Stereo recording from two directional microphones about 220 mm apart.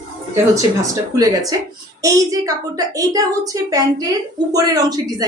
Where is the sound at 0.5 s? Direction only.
15° right (ahead or behind).